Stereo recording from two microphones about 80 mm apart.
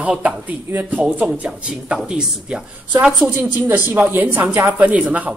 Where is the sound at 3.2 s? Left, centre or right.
Right.